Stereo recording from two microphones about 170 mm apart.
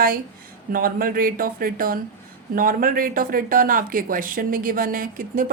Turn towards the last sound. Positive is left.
turn(degrees=-55)  # may be behind; listen again after turning